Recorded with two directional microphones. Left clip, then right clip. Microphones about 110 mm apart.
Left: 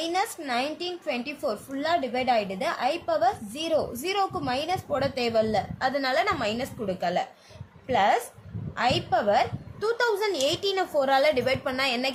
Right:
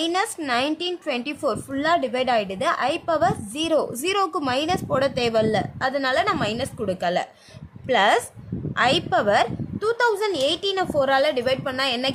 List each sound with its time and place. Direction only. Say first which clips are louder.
0.0 s a woman's voice: right 4 dB; 45° right (ahead or behind)
6.8 s a woman's voice: right 4 dB; 50° right (ahead or behind)
7.9 s a woman's voice: right 4 dB; 65° right (ahead or behind)
9.7 s a woman's voice: right 4 dB; 35° right (ahead or behind)